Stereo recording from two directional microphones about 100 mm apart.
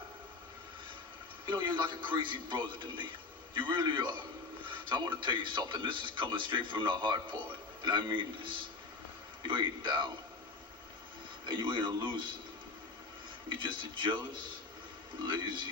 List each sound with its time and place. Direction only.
1.4 s a man's voice: 50° right (ahead or behind)
11.4 s a man's voice: 55° right (ahead or behind)
13.5 s a man's voice: 55° right (ahead or behind)